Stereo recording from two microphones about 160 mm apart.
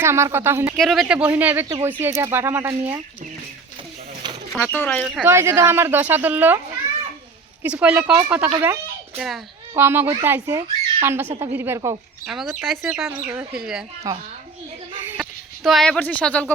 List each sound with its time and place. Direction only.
0.0 s speech: 15° right (ahead or behind)
0.8 s speech: centre (ahead or behind)
4.5 s speech: 5° left (ahead or behind)
5.0 s speech: centre (ahead or behind)
5.3 s speech: 15° right (ahead or behind)
7.6 s speech: 5° right (ahead or behind)
8.5 s speech: 15° right (ahead or behind)
9.1 s speech: centre (ahead or behind)
9.7 s speech: 15° right (ahead or behind)
12.2 s speech: centre (ahead or behind)
14.0 s a child's voice: 20° right (ahead or behind)
15.2 s speech: centre (ahead or behind)